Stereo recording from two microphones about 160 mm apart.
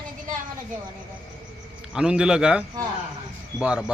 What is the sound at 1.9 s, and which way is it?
A man's voice, 5° right (ahead or behind).